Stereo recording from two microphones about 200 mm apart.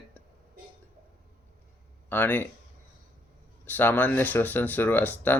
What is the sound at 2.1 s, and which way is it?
Speech, 10° left (ahead or behind).